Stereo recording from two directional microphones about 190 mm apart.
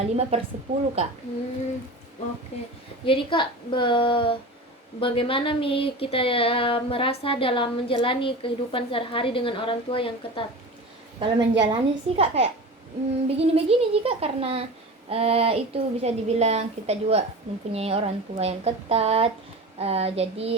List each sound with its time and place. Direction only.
0.0 s a woman's voice: 35° right (ahead or behind)
2.5 s speech: 35° left (ahead or behind)
3.1 s a sound: 25° left (ahead or behind)
11.2 s a woman's voice: 25° right (ahead or behind)